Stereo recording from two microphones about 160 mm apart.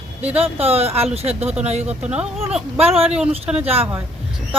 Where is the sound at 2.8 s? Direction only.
40° right (ahead or behind).